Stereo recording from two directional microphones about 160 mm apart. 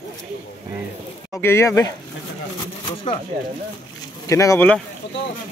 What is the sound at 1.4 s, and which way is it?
Speech, 15° left (ahead or behind).